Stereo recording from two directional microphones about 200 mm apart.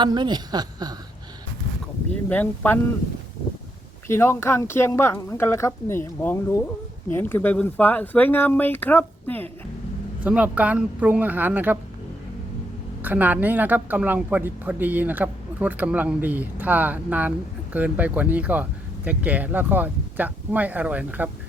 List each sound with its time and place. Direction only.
0.0 s a woman's voice: 20° right (ahead or behind)
2.3 s speech: 10° left (ahead or behind)
4.0 s speech: 10° left (ahead or behind)
10.2 s a woman's voice: 5° right (ahead or behind)
13.0 s a woman's voice: 10° right (ahead or behind)